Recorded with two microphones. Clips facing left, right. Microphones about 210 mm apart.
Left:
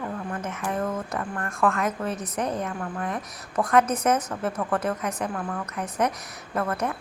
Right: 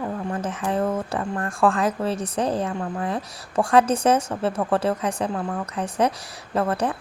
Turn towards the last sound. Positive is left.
turn(degrees=-30)  # may be behind; listen again after turning